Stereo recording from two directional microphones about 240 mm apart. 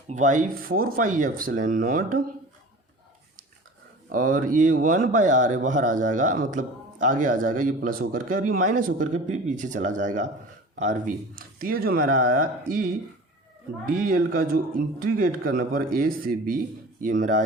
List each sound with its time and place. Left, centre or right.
0.1 s speech: right
4.1 s speech: right
13.8 s speech: right